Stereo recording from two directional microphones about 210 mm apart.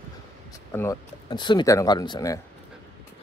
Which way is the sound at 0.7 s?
15° left (ahead or behind).